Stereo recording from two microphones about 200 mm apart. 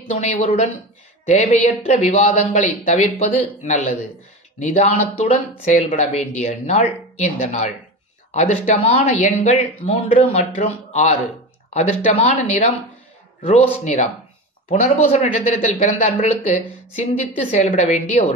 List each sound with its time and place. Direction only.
0.1 s speech: 35° left (ahead or behind)